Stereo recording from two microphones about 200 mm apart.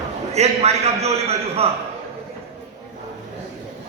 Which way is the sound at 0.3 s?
35° right (ahead or behind).